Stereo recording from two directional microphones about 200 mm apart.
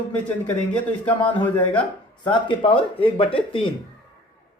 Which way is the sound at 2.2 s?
25° left (ahead or behind).